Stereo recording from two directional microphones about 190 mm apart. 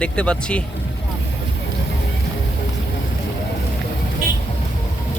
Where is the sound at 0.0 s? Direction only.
5° left (ahead or behind).